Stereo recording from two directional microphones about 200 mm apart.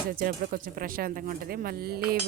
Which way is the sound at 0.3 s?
45° right (ahead or behind).